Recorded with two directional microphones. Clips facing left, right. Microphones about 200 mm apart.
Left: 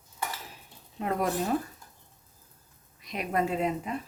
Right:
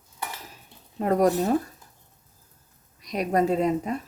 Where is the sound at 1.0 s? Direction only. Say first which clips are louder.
Right 8 dB; 40° right (ahead or behind).